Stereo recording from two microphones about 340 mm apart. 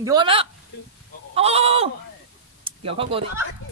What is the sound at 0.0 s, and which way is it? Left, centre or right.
Speech, centre.